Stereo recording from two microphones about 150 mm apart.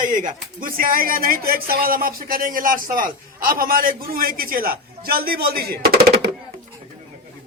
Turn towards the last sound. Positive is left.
turn(degrees=-90)